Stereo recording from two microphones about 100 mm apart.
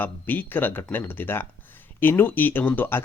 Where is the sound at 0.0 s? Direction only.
20° left (ahead or behind).